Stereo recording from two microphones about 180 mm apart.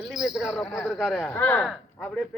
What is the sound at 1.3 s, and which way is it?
Speech, 10° left (ahead or behind).